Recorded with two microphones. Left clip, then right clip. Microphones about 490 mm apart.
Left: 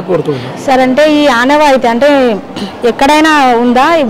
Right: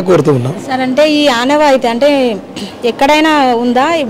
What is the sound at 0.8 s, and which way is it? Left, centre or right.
Speech, centre.